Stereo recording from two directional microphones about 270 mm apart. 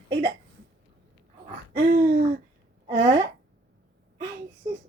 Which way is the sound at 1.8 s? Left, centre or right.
Right.